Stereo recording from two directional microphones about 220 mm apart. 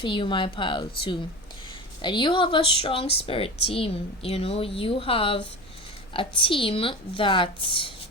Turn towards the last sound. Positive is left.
turn(degrees=25)  # may be behind; listen again after turning